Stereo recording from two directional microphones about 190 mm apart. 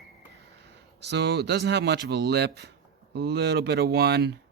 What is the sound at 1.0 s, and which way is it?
Speech, 60° right (ahead or behind).